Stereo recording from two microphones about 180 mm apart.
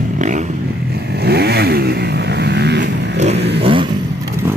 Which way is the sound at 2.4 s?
70° right (ahead or behind).